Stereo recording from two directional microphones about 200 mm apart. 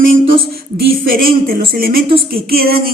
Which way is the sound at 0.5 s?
50° right (ahead or behind).